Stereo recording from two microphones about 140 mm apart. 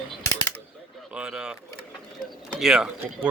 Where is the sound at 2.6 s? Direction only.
5° right (ahead or behind).